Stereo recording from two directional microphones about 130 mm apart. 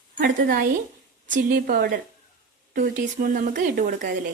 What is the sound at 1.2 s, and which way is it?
Speech, 90° right.